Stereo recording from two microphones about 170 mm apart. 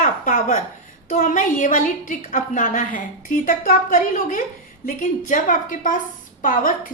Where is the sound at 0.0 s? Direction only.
50° left (ahead or behind).